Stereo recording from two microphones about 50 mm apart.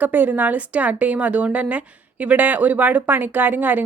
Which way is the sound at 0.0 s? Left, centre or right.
Right.